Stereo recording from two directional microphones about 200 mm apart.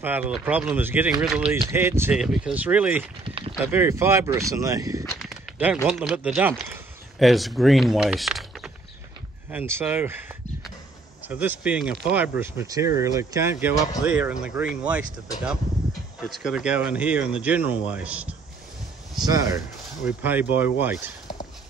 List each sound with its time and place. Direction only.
0.0 s speech: 10° right (ahead or behind)
3.3 s a sound: 30° right (ahead or behind)
3.6 s speech: 10° right (ahead or behind)
5.2 s a sound: 5° right (ahead or behind)
5.9 s speech: 5° right (ahead or behind)
16.3 s speech: 5° right (ahead or behind)
19.1 s speech: 20° right (ahead or behind)